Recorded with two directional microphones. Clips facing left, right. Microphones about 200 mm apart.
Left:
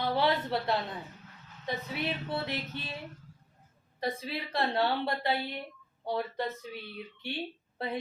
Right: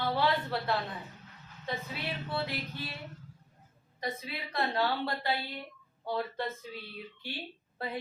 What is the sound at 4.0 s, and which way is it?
Speech, 30° left (ahead or behind).